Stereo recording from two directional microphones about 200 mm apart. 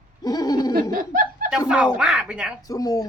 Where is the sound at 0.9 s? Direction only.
45° right (ahead or behind).